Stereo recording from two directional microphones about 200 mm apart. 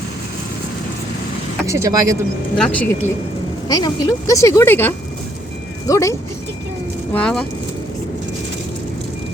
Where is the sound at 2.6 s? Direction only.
5° left (ahead or behind).